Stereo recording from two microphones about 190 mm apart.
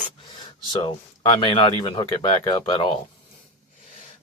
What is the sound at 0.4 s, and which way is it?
A man's voice, 30° left (ahead or behind).